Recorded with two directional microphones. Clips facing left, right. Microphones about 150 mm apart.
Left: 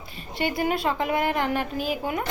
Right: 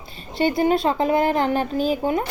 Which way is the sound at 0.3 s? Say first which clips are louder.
Right 6 dB; 30° right (ahead or behind).